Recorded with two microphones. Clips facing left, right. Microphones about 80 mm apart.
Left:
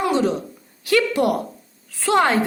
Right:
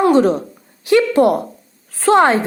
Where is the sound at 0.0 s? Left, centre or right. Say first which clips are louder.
Right 7 dB; right.